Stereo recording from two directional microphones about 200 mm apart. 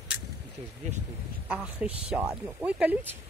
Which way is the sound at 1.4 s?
5° right (ahead or behind).